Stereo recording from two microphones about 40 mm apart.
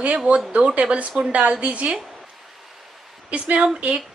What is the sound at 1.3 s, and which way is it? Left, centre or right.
Speech, right.